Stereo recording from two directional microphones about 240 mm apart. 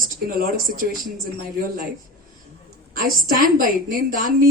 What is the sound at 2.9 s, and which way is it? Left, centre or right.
Speech, right.